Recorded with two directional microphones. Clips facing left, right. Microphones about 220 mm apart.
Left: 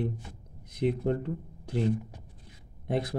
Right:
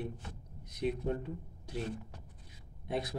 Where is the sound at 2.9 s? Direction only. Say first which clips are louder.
Left 6 dB; 50° left (ahead or behind).